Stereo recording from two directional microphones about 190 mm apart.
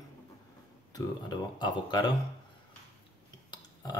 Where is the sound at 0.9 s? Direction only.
20° left (ahead or behind).